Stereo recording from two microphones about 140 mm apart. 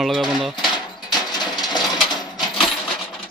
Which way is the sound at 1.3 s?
30° left (ahead or behind).